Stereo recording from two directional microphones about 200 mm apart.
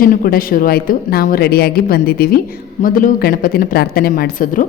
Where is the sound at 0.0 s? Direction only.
45° left (ahead or behind).